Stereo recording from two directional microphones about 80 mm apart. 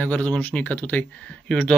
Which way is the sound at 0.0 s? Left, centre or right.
Centre.